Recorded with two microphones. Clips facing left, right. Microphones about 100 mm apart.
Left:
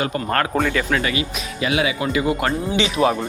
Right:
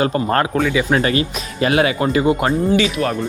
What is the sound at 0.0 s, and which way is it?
Speech, 30° right (ahead or behind).